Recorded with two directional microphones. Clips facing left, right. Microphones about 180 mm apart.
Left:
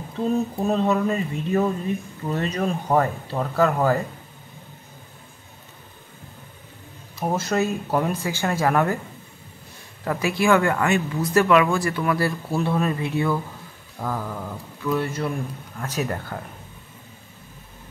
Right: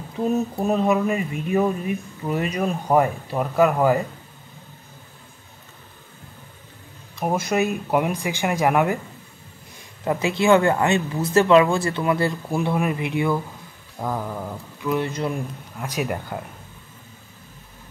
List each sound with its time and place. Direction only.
0.2 s speech: 15° right (ahead or behind)
7.2 s speech: 15° right (ahead or behind)
10.0 s speech: 20° right (ahead or behind)